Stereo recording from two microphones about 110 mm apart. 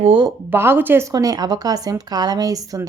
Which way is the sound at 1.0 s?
35° right (ahead or behind).